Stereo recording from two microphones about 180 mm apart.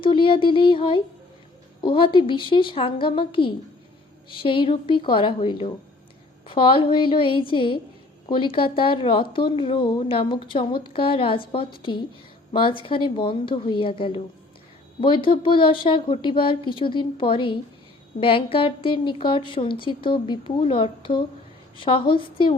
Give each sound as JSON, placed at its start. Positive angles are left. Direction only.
{"t": 0.0, "sound": "a woman's voice", "side_deg": 30}